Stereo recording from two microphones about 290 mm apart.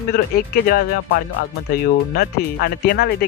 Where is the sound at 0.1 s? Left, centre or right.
Left.